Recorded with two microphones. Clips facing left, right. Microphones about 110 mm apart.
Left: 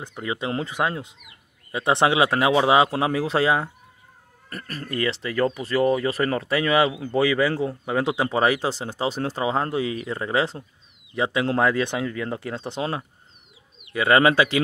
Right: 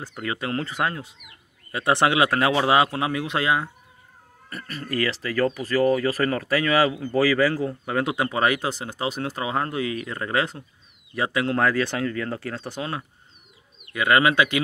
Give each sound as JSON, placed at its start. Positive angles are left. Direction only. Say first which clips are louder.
{"t": 0.0, "sound": "speech", "louder": "left 1 dB", "side_deg": 15}
{"t": 4.5, "sound": "speech", "louder": "left 1 dB", "side_deg": 40}
{"t": 4.8, "sound": "speech", "louder": "even", "side_deg": 25}